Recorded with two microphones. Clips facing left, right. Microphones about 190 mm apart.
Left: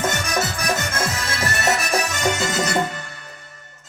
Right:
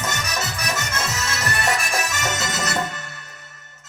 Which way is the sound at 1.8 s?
35° left (ahead or behind).